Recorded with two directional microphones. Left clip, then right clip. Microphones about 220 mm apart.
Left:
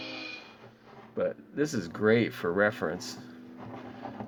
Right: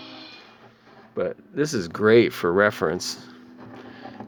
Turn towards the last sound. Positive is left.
turn(degrees=-40)  # may be behind; listen again after turning